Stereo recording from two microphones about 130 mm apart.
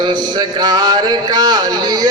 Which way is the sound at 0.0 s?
35° right (ahead or behind).